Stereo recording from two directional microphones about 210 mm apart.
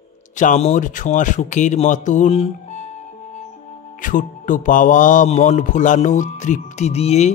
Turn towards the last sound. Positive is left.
turn(degrees=30)  # may be behind; listen again after turning